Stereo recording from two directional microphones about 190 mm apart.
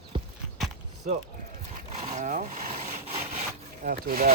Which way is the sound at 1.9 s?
35° right (ahead or behind).